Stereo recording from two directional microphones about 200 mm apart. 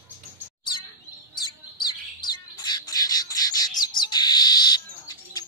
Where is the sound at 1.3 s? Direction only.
20° left (ahead or behind).